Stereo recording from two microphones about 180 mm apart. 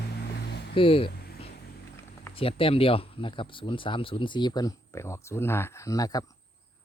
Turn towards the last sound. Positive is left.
turn(degrees=20)  # may be behind; listen again after turning